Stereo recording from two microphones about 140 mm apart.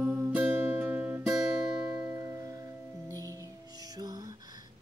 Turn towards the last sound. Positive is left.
turn(degrees=-25)  # may be behind; listen again after turning